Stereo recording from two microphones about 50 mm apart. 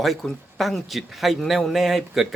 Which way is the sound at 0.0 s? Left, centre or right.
Centre.